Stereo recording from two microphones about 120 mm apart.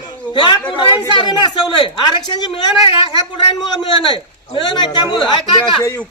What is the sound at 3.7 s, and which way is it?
A woman's voice, 40° left (ahead or behind).